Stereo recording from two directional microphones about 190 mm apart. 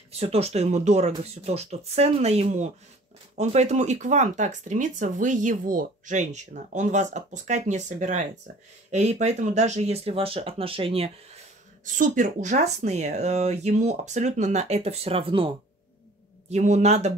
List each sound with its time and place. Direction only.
0.1 s speech: 30° right (ahead or behind)
11.8 s speech: 40° right (ahead or behind)